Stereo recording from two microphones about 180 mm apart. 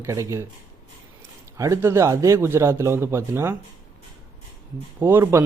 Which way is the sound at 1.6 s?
15° right (ahead or behind).